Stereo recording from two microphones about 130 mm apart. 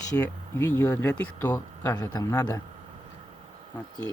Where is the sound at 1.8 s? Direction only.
30° left (ahead or behind).